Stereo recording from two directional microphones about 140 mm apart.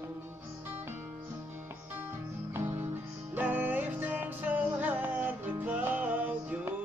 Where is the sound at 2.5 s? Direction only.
15° right (ahead or behind).